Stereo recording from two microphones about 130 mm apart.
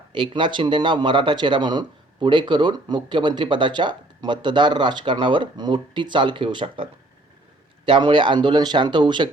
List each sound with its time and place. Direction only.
0.1 s speech: 40° right (ahead or behind)
7.9 s speech: 40° right (ahead or behind)